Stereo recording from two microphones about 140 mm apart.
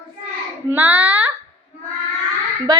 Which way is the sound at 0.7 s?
15° right (ahead or behind).